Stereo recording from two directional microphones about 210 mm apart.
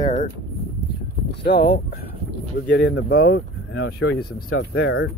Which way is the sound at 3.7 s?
55° left (ahead or behind).